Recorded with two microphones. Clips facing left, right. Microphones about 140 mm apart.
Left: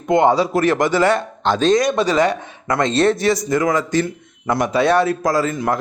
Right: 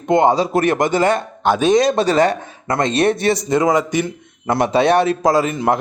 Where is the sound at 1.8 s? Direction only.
30° right (ahead or behind).